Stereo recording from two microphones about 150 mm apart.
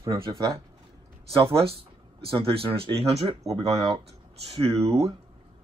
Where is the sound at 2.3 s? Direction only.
40° right (ahead or behind).